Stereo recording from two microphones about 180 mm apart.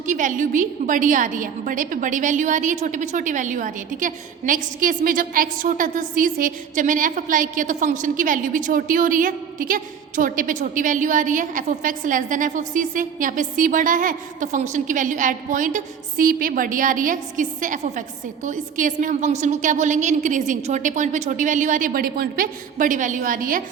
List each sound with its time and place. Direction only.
0.0 s a woman's voice: 45° right (ahead or behind)